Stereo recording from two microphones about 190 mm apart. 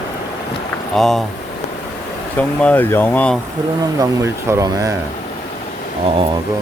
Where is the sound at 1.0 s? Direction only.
Centre (ahead or behind).